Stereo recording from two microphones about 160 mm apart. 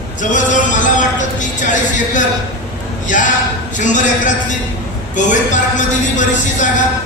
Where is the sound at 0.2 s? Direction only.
50° left (ahead or behind).